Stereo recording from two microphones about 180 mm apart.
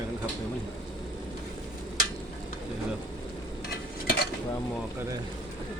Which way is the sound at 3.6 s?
60° left (ahead or behind).